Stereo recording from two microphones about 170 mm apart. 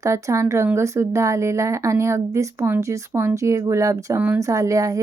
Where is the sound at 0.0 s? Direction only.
15° right (ahead or behind).